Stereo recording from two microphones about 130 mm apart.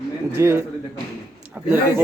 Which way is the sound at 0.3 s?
20° right (ahead or behind).